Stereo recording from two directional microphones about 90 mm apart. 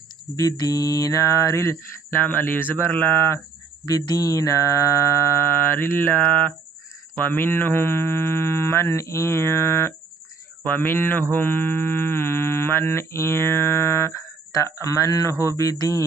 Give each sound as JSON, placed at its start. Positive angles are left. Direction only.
{"t": 0.3, "sound": "mantra", "side_deg": 40}
{"t": 3.8, "sound": "mantra", "side_deg": 45}